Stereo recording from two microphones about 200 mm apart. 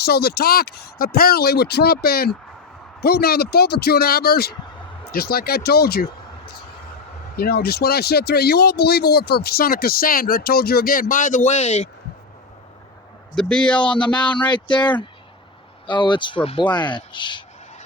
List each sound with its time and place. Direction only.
0.0 s speech: 50° left (ahead or behind)
7.3 s speech: 50° left (ahead or behind); by 11.9 s 30° left (ahead or behind)
13.3 s speech: 5° left (ahead or behind)
13.8 s speech: 25° left (ahead or behind)
14.1 s speech: 5° left (ahead or behind)
14.5 s speech: 20° left (ahead or behind)